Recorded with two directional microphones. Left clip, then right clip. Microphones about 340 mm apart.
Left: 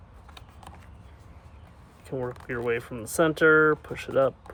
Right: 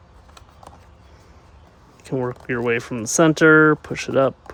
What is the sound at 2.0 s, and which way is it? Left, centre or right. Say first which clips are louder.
Speech: right 8 dB; right.